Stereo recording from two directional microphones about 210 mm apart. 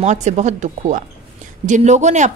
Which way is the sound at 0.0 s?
35° right (ahead or behind).